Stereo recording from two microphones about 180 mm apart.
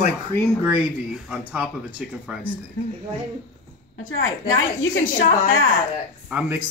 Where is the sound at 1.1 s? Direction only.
5° right (ahead or behind).